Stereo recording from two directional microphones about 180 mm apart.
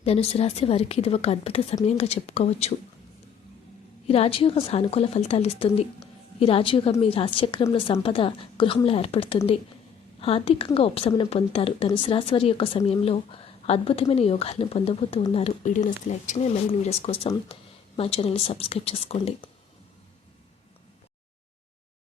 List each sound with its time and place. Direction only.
0.0 s speech: 35° left (ahead or behind)
4.0 s a woman's voice: 35° left (ahead or behind)